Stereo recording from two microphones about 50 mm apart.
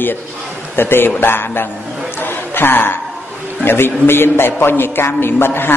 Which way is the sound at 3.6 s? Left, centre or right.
Left.